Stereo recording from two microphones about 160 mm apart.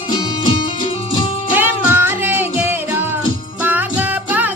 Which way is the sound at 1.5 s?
10° right (ahead or behind).